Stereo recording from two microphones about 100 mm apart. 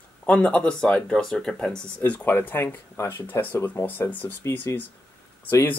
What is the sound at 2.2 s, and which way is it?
Speech, 20° left (ahead or behind).